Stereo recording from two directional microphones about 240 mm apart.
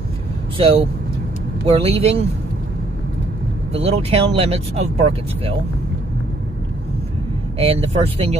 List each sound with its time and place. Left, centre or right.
0.6 s speech: right
3.7 s speech: right
7.5 s speech: right